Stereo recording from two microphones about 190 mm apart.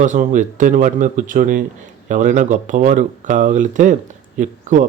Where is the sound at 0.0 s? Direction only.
40° right (ahead or behind).